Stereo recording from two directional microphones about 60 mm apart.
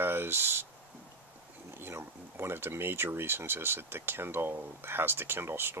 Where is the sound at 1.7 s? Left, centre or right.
Right.